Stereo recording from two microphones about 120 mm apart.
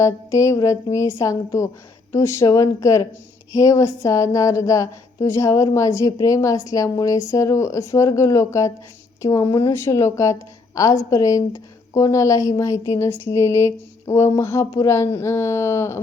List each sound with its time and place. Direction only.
0.0 s a woman's voice: 25° left (ahead or behind)